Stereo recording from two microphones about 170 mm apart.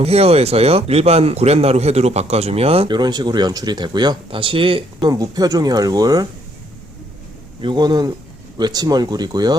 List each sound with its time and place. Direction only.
0.0 s speech: 35° right (ahead or behind); by 6.2 s 20° right (ahead or behind)
7.6 s speech: 25° right (ahead or behind)